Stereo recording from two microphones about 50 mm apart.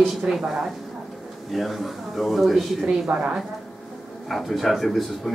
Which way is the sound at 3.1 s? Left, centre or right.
Right.